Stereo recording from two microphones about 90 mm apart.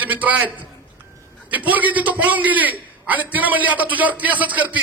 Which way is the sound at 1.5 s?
20° right (ahead or behind).